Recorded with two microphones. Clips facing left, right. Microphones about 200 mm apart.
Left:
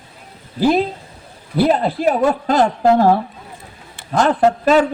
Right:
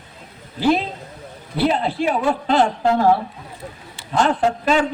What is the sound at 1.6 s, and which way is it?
A man's voice, 40° left (ahead or behind).